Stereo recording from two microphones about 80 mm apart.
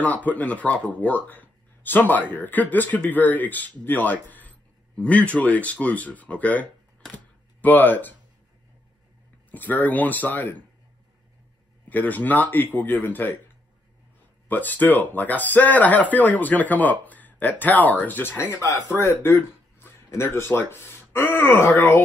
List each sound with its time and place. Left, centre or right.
0.0 s speech: centre
9.5 s speech: left
11.9 s speech: left
14.5 s speech: left
18.6 s speech: left